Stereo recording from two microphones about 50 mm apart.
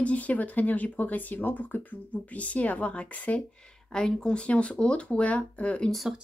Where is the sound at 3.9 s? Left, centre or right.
Centre.